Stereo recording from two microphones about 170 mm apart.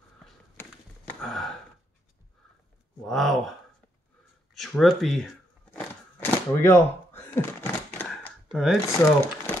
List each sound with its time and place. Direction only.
0.6 s a sound: 5° left (ahead or behind)
3.1 s speech: centre (ahead or behind)
4.6 s speech: centre (ahead or behind)
5.8 s a sound: 10° left (ahead or behind)
8.5 s speech: centre (ahead or behind)
8.8 s speech: 15° left (ahead or behind)